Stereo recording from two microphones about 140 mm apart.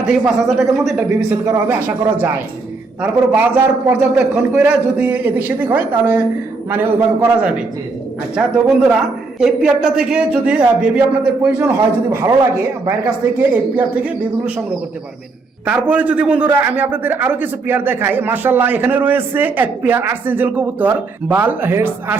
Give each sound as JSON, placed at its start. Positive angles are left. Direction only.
{"t": 0.1, "sound": "speech", "side_deg": 0}
{"t": 1.5, "sound": "a man's voice", "side_deg": -10}
{"t": 3.0, "sound": "a man's voice", "side_deg": -15}
{"t": 13.5, "sound": "a man's voice", "side_deg": -10}
{"t": 15.6, "sound": "a man's voice", "side_deg": -10}